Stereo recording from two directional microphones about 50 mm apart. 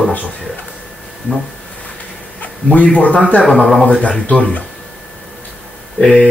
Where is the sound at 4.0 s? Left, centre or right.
Left.